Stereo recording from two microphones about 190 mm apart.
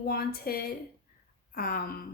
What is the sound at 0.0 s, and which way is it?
Speech, 55° left (ahead or behind).